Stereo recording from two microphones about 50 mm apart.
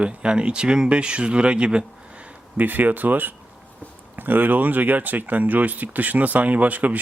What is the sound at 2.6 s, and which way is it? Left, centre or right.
Speech, right.